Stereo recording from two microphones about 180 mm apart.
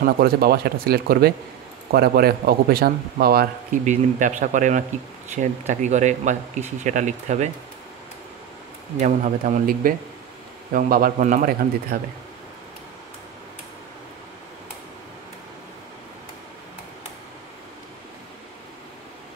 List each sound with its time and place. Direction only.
0.0 s a man's voice: 60° right (ahead or behind); by 7.5 s 40° right (ahead or behind)
8.9 s a man's voice: 45° right (ahead or behind)